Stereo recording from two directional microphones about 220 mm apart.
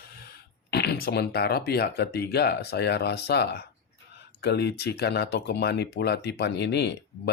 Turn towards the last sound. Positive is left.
turn(degrees=50)  # may be behind; listen again after turning